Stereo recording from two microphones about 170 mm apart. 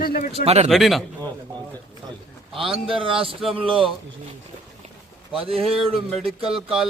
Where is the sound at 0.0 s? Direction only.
60° left (ahead or behind).